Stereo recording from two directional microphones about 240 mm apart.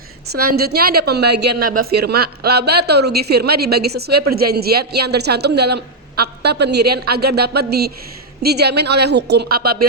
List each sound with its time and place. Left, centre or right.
0.4 s a woman's voice: right